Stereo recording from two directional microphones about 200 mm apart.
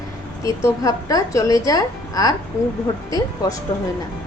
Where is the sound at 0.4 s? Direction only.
15° left (ahead or behind).